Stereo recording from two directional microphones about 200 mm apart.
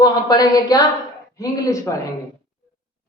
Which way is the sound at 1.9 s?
15° left (ahead or behind).